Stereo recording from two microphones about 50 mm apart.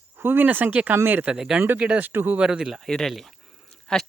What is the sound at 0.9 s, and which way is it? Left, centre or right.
Speech, right.